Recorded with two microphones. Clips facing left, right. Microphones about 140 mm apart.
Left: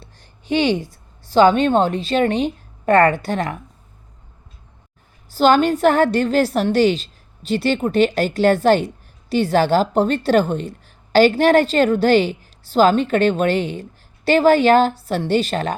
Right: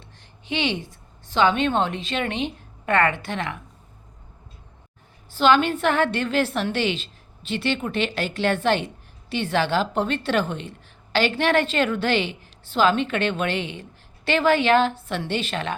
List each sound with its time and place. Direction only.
0.0 s a woman's voice: 40° left (ahead or behind)
5.3 s a woman's voice: 40° left (ahead or behind)